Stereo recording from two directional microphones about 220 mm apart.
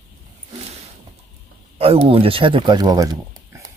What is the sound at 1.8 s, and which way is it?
Speech, 25° right (ahead or behind).